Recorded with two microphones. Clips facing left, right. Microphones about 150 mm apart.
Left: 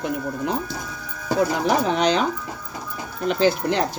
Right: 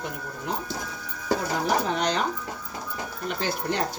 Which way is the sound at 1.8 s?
90° left.